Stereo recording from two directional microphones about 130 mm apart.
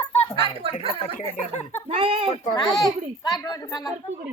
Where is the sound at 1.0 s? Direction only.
55° left (ahead or behind).